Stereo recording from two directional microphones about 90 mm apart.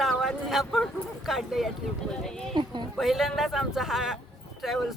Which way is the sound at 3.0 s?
Centre (ahead or behind).